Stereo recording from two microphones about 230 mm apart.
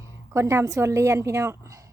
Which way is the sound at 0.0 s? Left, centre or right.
Centre.